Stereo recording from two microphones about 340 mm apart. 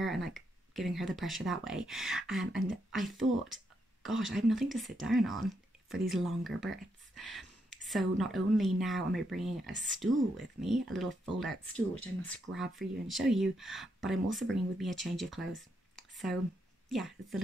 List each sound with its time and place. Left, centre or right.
0.0 s speech: centre
3.2 s speech: right
4.3 s speech: centre
16.0 s a sound: centre
16.9 s speech: centre